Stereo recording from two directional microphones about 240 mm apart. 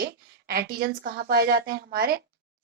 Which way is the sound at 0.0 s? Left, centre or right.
Right.